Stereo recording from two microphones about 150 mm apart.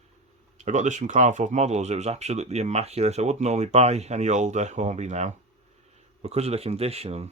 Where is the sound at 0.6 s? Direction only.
55° right (ahead or behind).